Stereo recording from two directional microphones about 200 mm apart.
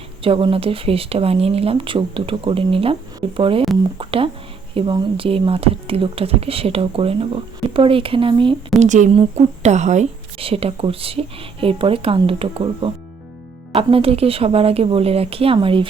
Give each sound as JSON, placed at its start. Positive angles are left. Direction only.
{"t": 0.2, "sound": "speech", "side_deg": -25}
{"t": 8.9, "sound": "speech", "side_deg": -35}